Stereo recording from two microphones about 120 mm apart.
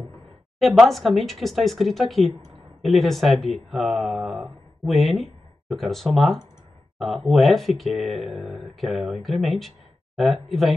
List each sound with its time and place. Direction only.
0.6 s speech: centre (ahead or behind)